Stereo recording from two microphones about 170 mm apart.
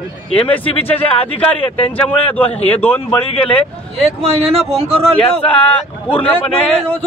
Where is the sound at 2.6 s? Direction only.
10° left (ahead or behind).